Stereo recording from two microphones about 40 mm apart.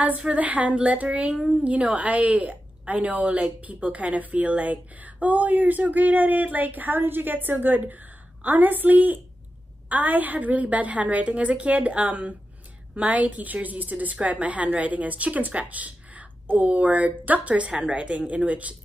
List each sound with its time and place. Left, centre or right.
0.3 s a woman's voice: right
15.7 s a sound: right
16.4 s a woman's voice: right